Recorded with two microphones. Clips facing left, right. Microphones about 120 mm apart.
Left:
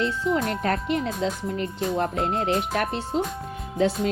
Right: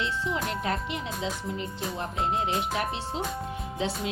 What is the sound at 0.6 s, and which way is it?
Speech, 55° left (ahead or behind).